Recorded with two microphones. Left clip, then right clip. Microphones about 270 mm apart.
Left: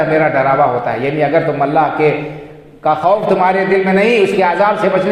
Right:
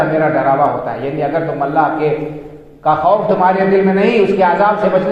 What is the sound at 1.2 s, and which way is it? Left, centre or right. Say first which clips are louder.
A man's voice: left 3 dB; left.